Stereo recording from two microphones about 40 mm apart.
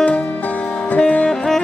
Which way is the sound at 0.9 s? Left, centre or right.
Left.